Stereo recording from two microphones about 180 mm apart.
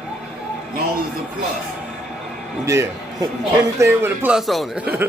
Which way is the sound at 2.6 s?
15° right (ahead or behind).